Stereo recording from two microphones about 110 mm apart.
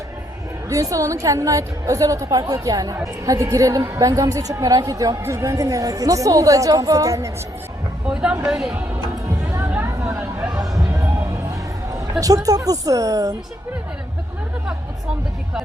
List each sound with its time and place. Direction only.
0.7 s a woman's voice: 30° right (ahead or behind)
8.0 s speech: 10° right (ahead or behind)
9.4 s a sound: 30° right (ahead or behind)
10.5 s music: 35° right (ahead or behind)
12.2 s a woman's voice: 35° right (ahead or behind)